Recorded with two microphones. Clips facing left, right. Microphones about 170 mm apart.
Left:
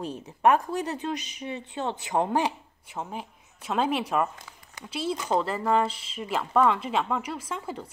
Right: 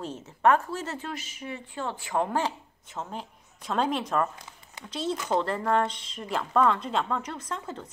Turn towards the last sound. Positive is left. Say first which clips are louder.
# left 2 dB
turn(degrees=10)  # may be behind; listen again after turning